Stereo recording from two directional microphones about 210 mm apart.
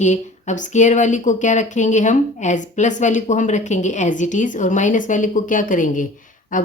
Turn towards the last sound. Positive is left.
turn(degrees=40)  # may be behind; listen again after turning